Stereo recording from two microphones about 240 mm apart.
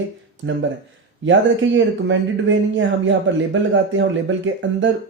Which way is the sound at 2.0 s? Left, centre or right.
Right.